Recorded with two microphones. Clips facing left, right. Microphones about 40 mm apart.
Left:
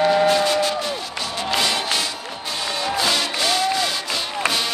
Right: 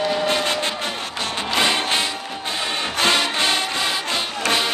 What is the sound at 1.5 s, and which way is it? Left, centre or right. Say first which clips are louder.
Music: right 2 dB; right.